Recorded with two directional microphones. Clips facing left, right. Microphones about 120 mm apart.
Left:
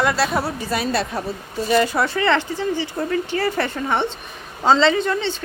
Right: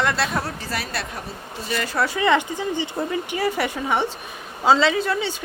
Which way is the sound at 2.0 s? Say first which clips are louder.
Even; 15° right (ahead or behind).